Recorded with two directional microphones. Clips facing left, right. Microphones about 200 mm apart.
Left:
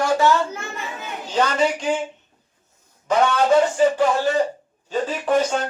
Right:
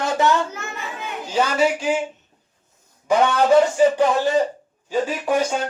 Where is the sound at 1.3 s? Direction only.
10° right (ahead or behind).